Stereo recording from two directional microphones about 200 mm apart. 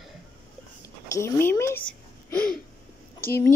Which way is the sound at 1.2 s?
15° left (ahead or behind).